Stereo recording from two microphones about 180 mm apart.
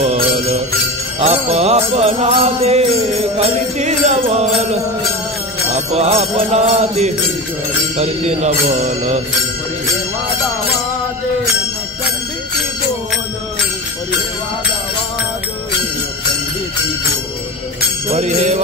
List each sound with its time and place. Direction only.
0.0 s jingle bell: 40° right (ahead or behind)
1.2 s music: 35° right (ahead or behind)
5.9 s music: 35° right (ahead or behind)
18.1 s music: 40° right (ahead or behind)